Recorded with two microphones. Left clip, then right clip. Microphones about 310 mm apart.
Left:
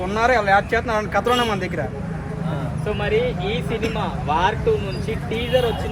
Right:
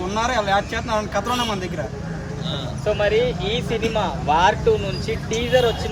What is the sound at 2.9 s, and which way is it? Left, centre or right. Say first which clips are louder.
Speech: right 3 dB; right.